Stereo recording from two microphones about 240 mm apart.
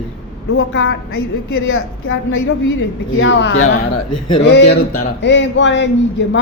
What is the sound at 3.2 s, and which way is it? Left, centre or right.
Speech, left.